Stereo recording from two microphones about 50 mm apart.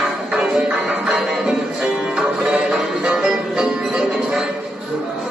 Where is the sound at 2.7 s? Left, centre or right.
Centre.